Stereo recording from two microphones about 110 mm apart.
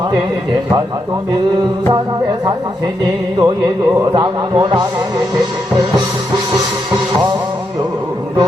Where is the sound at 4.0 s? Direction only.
40° right (ahead or behind).